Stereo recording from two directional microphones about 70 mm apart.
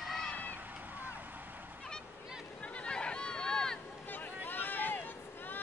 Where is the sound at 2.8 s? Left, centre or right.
Centre.